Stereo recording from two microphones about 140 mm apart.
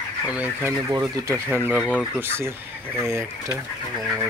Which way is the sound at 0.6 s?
20° right (ahead or behind).